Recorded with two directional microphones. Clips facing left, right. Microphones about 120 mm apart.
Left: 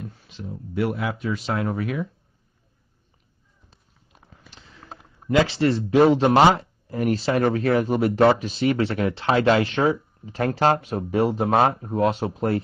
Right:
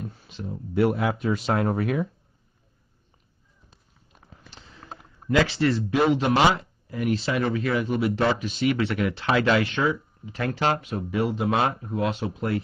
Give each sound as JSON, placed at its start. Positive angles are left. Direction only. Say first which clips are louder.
{"t": 0.7, "sound": "speech", "louder": "right 3 dB", "side_deg": -40}
{"t": 5.3, "sound": "speech", "louder": "left 2 dB", "side_deg": 25}